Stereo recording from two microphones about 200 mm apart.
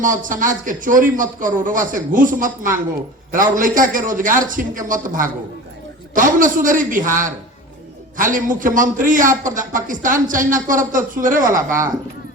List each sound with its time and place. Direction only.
0.0 s a man's voice: 40° right (ahead or behind)